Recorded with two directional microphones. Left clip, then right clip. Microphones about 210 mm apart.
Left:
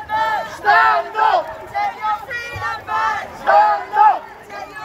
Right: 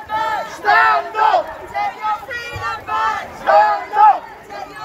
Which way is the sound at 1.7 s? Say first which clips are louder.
Left 1 dB; 10° right (ahead or behind).